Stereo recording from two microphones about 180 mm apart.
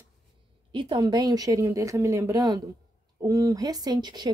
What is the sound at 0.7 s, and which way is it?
A woman's voice, 25° right (ahead or behind).